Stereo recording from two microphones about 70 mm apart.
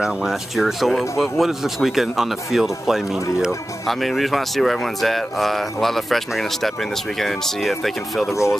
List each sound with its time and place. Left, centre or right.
0.0 s speech: centre